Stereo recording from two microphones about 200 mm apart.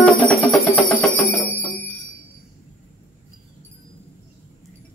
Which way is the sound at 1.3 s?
10° left (ahead or behind).